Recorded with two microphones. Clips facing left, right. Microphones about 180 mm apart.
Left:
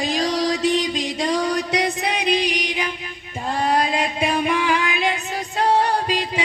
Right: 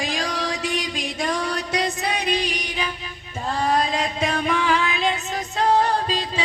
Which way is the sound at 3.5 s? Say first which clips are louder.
Left 1 dB; 15° left (ahead or behind).